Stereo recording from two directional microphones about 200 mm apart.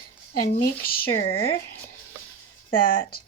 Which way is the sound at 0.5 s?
45° left (ahead or behind).